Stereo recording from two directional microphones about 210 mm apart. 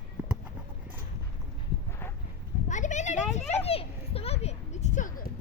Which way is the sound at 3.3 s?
30° left (ahead or behind).